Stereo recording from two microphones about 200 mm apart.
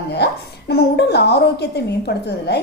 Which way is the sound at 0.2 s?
55° left (ahead or behind).